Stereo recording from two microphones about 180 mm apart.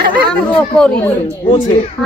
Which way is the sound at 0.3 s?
5° left (ahead or behind).